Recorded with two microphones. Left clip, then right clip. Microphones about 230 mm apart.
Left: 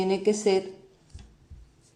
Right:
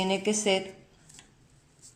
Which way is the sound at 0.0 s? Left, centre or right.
Right.